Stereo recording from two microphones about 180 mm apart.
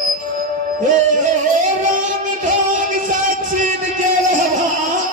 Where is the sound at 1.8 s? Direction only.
45° right (ahead or behind).